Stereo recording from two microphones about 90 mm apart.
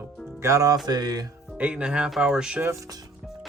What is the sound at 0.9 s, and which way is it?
Music, 50° right (ahead or behind).